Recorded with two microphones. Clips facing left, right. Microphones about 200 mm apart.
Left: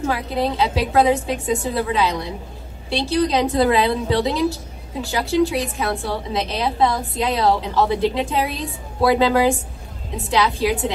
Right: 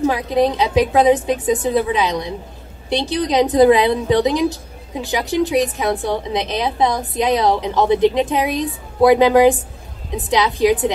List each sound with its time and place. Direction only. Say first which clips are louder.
0.0 s a woman's voice: right 6 dB; 20° right (ahead or behind)